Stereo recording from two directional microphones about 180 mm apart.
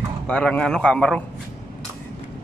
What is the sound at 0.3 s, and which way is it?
Speech, 5° left (ahead or behind).